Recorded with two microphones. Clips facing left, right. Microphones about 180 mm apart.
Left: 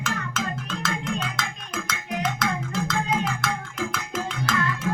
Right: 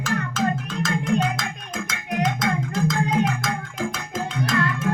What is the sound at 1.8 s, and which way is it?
Music, 70° left (ahead or behind).